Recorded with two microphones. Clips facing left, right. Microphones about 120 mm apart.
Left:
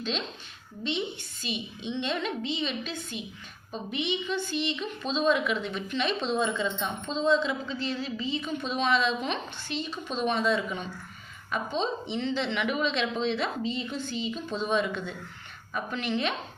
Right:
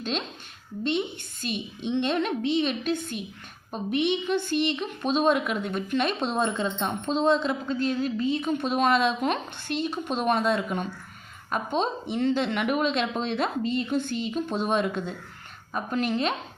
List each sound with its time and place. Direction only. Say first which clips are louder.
0.9 s a woman's voice: right 4 dB; 50° right (ahead or behind)